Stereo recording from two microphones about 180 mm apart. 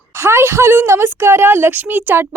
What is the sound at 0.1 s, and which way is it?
A woman's voice, 15° right (ahead or behind).